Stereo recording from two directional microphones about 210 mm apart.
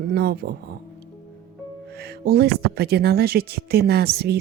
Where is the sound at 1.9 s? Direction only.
50° right (ahead or behind).